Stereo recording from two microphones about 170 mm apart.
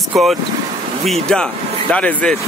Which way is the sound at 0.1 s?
Centre (ahead or behind).